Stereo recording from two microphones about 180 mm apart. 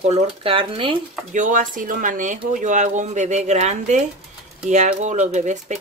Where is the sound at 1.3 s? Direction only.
45° right (ahead or behind).